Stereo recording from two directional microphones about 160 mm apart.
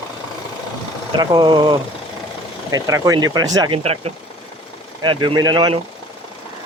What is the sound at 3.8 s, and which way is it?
Speech, 40° right (ahead or behind).